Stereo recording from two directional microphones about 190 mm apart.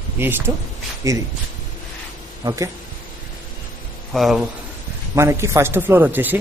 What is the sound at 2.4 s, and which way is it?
Speech, 15° right (ahead or behind).